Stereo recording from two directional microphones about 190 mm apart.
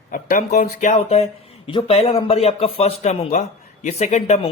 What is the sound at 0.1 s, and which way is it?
Speech, 45° left (ahead or behind).